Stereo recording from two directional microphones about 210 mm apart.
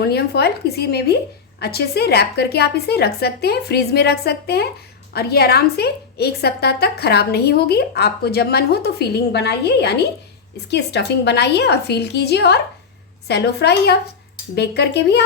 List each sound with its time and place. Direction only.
0.0 s a woman's voice: 50° left (ahead or behind)